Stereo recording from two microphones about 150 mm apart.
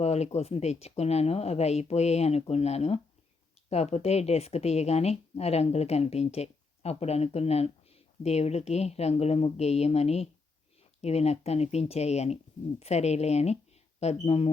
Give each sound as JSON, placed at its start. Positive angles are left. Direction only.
{"t": 0.0, "sound": "a woman's voice", "side_deg": 45}